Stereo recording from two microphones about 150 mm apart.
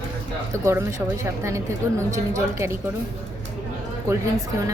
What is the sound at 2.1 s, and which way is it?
Speech, 20° right (ahead or behind).